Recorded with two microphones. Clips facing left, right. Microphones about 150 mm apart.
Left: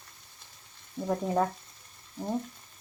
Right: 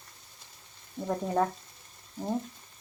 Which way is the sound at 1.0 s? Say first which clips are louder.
Even; centre (ahead or behind).